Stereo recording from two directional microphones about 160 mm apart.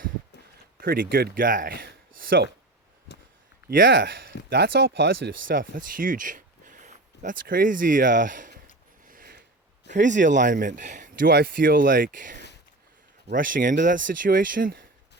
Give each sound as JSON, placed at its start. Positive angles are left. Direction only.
{"t": 0.8, "sound": "speech", "side_deg": -65}
{"t": 3.7, "sound": "speech", "side_deg": -65}
{"t": 4.4, "sound": "speech", "side_deg": -90}
{"t": 9.0, "sound": "a sound", "side_deg": -65}
{"t": 9.9, "sound": "speech", "side_deg": -50}